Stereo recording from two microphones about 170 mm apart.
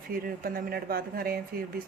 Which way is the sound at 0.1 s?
60° right (ahead or behind).